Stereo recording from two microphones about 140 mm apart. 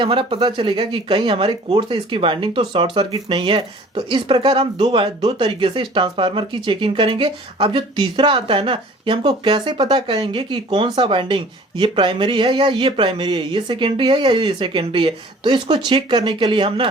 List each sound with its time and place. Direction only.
0.0 s speech: 40° right (ahead or behind)